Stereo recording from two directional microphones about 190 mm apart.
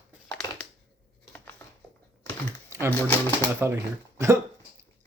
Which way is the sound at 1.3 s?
10° left (ahead or behind).